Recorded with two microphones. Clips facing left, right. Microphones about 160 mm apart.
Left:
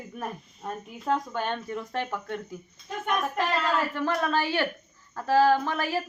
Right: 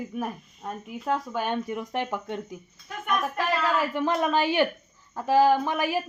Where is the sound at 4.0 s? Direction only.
15° right (ahead or behind).